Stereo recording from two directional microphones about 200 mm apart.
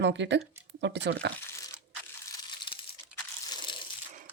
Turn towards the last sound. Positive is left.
turn(degrees=20)  # may be behind; listen again after turning